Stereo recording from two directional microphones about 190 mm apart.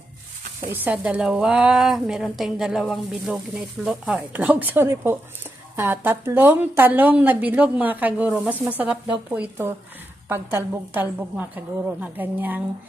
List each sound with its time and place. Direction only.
0.7 s a woman's voice: 10° right (ahead or behind)